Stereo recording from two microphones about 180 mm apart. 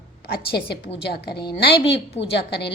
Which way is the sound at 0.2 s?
60° left (ahead or behind).